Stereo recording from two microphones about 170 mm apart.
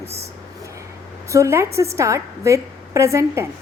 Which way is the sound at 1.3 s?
15° right (ahead or behind).